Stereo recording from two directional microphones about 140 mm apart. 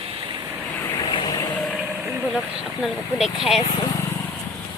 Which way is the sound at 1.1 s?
30° left (ahead or behind).